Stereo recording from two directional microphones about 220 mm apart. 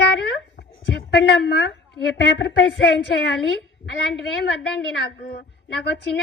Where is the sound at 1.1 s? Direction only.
55° left (ahead or behind).